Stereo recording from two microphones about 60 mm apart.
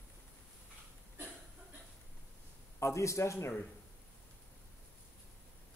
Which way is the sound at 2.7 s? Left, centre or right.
Left.